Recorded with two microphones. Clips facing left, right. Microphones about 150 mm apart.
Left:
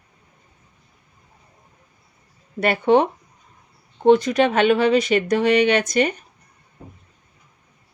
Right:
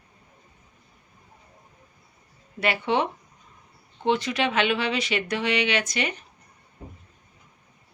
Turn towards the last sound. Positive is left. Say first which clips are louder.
# left 8 dB
turn(degrees=45)  # may be behind; listen again after turning